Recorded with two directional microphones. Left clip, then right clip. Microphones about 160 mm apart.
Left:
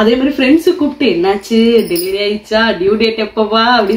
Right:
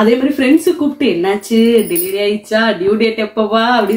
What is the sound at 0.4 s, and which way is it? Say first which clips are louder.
Speech: left 1 dB; 5° right (ahead or behind).